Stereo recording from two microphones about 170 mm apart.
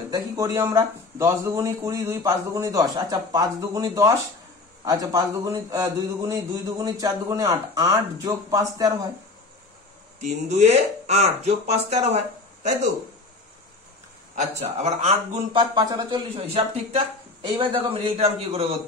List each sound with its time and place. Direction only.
0.1 s speech: 20° right (ahead or behind)
10.2 s speech: 40° right (ahead or behind)
14.3 s speech: 40° right (ahead or behind)
15.6 s speech: 25° right (ahead or behind)